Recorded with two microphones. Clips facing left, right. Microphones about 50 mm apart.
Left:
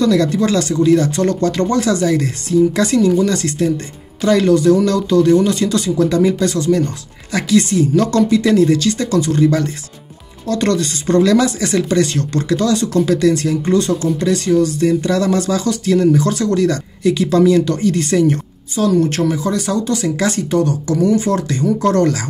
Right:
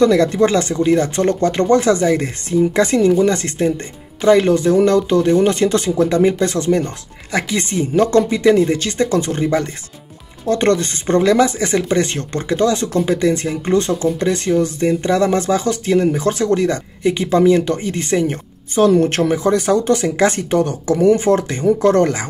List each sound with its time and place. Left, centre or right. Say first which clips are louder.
0.0 s speech: right 2 dB; right
18.8 s speech: right 2 dB; right